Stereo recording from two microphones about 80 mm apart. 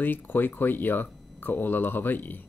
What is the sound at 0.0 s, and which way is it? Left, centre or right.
Speech, left.